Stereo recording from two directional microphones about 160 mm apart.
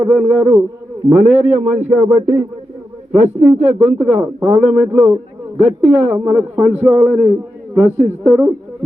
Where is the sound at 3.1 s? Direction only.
45° right (ahead or behind).